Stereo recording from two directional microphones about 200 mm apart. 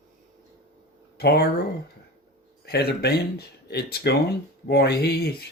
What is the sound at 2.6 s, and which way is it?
Speech, 55° left (ahead or behind).